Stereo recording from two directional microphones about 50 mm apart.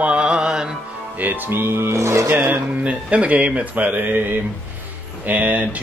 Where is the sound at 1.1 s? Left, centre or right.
Right.